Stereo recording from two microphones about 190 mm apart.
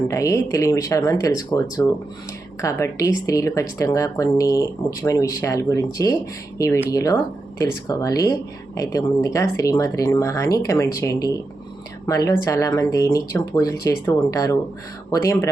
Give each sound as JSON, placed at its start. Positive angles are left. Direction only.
{"t": 0.1, "sound": "speech", "side_deg": 15}